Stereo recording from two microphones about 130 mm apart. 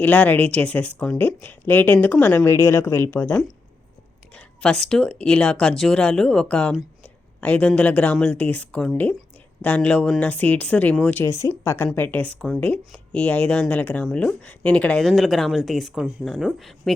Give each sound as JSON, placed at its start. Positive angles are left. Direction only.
{"t": 0.0, "sound": "speech", "side_deg": 10}
{"t": 4.4, "sound": "speech", "side_deg": 5}
{"t": 7.0, "sound": "a sound", "side_deg": 10}
{"t": 7.7, "sound": "a woman's voice", "side_deg": 10}